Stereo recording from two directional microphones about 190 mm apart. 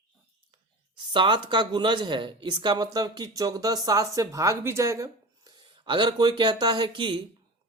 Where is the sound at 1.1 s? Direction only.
25° right (ahead or behind).